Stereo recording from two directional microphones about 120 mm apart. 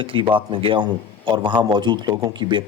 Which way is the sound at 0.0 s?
45° right (ahead or behind).